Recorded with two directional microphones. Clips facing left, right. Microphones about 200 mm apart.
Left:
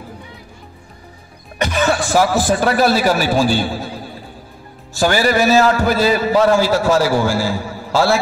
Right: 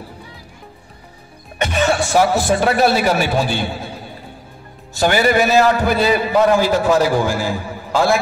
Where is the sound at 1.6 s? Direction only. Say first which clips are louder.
Even; 25° right (ahead or behind).